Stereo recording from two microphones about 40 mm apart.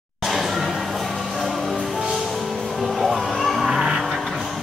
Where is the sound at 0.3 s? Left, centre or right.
Centre.